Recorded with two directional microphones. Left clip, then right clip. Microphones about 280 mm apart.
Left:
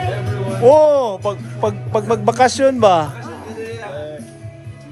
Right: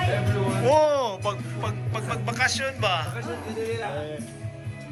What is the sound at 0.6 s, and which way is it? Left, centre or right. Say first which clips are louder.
Music: left 11 dB; centre.